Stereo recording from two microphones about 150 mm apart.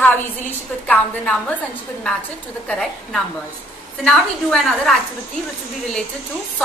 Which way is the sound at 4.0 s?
5° left (ahead or behind).